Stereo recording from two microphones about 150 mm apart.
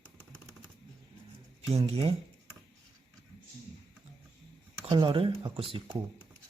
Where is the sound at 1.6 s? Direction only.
40° right (ahead or behind).